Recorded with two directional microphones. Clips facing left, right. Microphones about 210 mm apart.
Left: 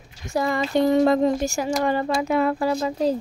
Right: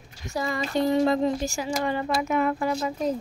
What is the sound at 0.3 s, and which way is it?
Speech, 55° left (ahead or behind).